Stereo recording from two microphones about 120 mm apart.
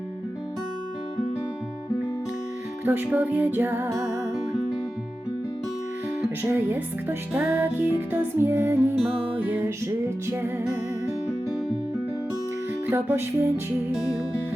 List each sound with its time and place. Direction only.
2.8 s music: 15° right (ahead or behind)
6.4 s music: 15° right (ahead or behind)
9.0 s music: 5° right (ahead or behind)
9.6 s music: 25° right (ahead or behind)
12.9 s music: 20° right (ahead or behind)